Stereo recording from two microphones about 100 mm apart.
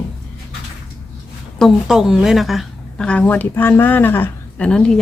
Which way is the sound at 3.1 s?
15° left (ahead or behind).